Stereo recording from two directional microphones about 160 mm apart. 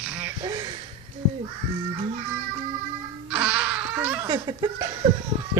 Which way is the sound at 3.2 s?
5° right (ahead or behind).